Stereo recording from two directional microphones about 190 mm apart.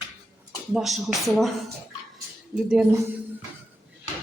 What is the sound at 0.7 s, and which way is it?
Speech, centre (ahead or behind).